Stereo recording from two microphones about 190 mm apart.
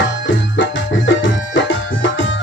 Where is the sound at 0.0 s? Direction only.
75° left (ahead or behind).